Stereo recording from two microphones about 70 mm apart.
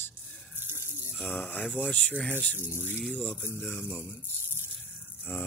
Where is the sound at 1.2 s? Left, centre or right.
Left.